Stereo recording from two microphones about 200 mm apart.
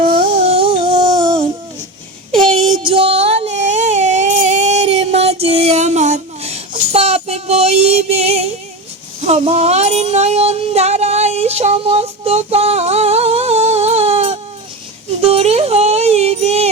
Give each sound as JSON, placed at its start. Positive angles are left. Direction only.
{"t": 0.4, "sound": "humming", "side_deg": -30}
{"t": 2.7, "sound": "a sound", "side_deg": -25}
{"t": 9.2, "sound": "music", "side_deg": -30}